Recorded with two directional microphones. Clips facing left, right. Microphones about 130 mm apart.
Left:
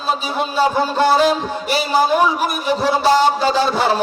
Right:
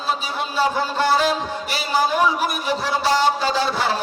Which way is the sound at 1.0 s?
25° left (ahead or behind).